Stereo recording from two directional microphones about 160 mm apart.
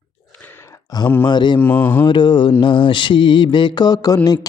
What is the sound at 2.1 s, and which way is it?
Mantra, 30° left (ahead or behind).